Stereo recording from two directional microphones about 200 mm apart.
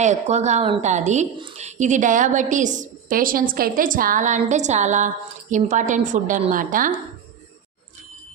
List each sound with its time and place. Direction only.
0.0 s a woman's voice: 35° right (ahead or behind)